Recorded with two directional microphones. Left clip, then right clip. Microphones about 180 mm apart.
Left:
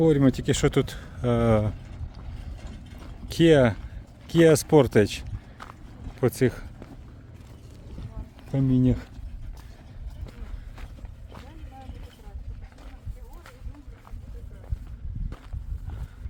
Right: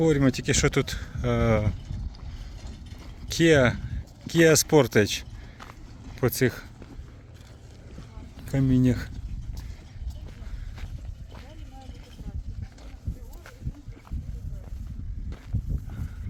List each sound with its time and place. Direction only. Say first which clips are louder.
0.0 s speech: left 2 dB; 15° left (ahead or behind)
3.2 s speech: left 1 dB; 15° left (ahead or behind)
8.4 s speech: even; 5° right (ahead or behind)